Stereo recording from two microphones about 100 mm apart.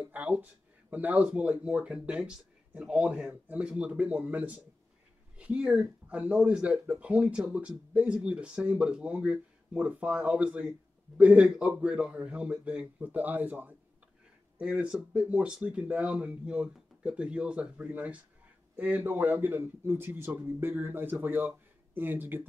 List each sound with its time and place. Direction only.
0.0 s speech: 15° right (ahead or behind)